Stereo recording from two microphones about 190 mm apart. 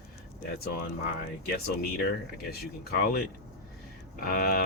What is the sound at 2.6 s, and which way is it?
Speech, 55° left (ahead or behind).